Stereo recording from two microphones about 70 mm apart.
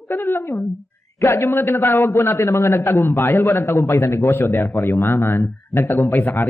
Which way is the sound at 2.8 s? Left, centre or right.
Left.